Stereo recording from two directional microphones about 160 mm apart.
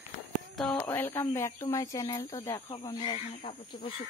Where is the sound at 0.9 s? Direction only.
15° left (ahead or behind).